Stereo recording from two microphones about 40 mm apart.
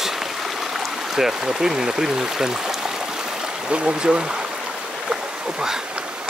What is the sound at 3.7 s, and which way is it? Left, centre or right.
Speech, right.